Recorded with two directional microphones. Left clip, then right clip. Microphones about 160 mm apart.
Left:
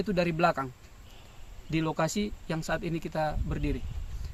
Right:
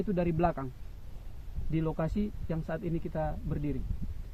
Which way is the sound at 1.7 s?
20° left (ahead or behind).